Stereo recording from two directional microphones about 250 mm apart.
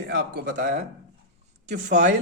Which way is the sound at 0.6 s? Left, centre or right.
Right.